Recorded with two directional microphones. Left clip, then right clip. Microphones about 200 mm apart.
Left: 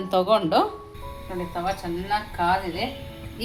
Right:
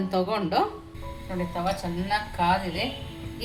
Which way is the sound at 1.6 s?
10° left (ahead or behind).